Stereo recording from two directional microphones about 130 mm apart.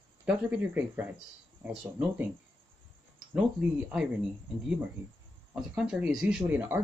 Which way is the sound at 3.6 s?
10° right (ahead or behind).